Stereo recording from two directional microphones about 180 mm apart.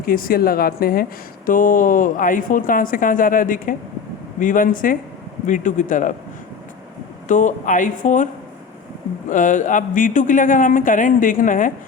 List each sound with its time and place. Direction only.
0.0 s speech: 55° left (ahead or behind)
7.3 s speech: 45° left (ahead or behind)
9.3 s speech: 45° left (ahead or behind)